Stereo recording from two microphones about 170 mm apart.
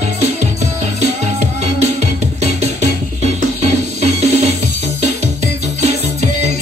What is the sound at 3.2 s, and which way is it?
Music, 40° right (ahead or behind).